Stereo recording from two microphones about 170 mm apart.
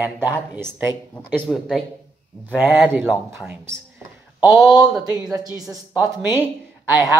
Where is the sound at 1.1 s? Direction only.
5° left (ahead or behind); by 3.7 s 15° right (ahead or behind).